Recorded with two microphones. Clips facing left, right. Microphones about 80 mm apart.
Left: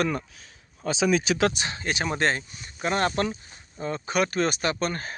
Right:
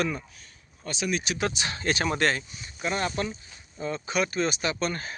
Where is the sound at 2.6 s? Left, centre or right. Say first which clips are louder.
Left 4 dB; left.